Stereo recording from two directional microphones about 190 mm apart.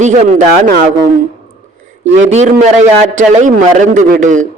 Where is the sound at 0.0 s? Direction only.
40° right (ahead or behind).